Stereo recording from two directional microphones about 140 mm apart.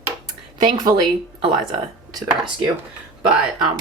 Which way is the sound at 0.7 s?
30° right (ahead or behind).